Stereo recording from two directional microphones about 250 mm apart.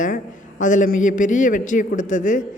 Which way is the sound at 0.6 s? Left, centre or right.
Left.